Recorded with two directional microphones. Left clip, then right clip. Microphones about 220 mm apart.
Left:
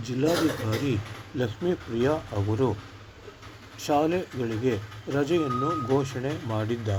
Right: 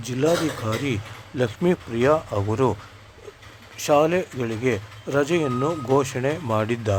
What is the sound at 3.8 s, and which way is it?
Speech, 30° right (ahead or behind).